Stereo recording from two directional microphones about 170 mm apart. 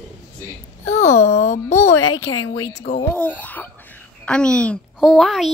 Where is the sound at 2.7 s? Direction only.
65° left (ahead or behind).